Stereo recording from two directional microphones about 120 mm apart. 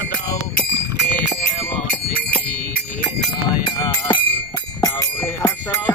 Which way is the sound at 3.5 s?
40° left (ahead or behind).